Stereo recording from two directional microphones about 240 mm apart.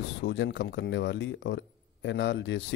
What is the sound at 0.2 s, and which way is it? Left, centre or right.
Speech, left.